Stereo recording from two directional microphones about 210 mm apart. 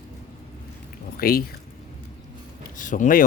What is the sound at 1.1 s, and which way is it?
Speech, 45° left (ahead or behind).